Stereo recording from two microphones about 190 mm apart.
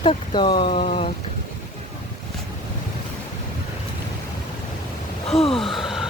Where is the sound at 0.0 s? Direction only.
25° left (ahead or behind).